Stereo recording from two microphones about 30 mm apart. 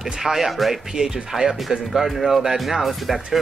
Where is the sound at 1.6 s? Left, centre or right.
Centre.